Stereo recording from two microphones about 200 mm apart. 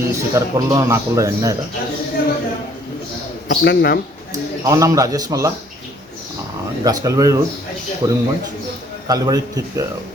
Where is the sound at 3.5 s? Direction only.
55° left (ahead or behind).